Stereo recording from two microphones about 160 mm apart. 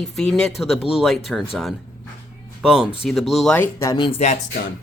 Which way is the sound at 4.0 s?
30° left (ahead or behind).